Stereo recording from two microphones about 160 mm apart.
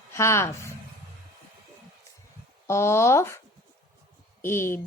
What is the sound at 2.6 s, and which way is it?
Speech, 15° left (ahead or behind).